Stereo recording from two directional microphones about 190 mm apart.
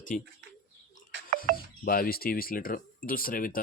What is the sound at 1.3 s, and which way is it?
Music, 45° right (ahead or behind).